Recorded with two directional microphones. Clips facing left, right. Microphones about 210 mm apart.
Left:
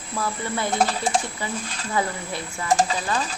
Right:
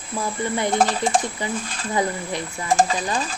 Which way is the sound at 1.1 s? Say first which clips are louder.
Right 3 dB; 50° right (ahead or behind).